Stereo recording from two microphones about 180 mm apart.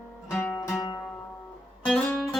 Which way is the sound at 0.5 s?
20° left (ahead or behind).